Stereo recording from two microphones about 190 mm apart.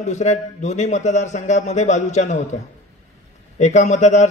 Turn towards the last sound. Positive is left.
turn(degrees=35)  # may be behind; listen again after turning